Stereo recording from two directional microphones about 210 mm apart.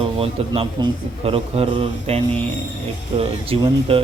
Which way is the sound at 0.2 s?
25° right (ahead or behind).